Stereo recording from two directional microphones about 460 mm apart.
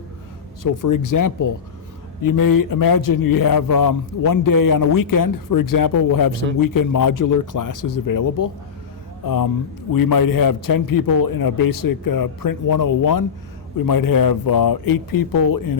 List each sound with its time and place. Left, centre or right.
0.6 s a man's voice: left